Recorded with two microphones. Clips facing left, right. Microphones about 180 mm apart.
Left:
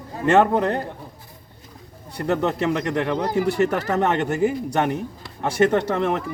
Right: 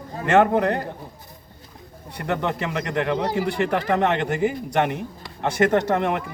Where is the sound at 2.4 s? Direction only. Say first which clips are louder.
Left 4 dB; 35° left (ahead or behind).